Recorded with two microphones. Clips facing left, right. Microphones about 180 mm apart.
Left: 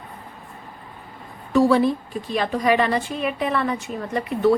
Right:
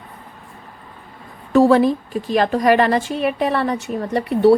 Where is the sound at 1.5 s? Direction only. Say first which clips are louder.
Right 4 dB; 45° right (ahead or behind).